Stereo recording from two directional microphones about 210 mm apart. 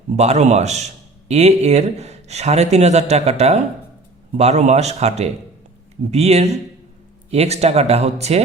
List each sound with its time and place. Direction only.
0.2 s speech: 30° right (ahead or behind)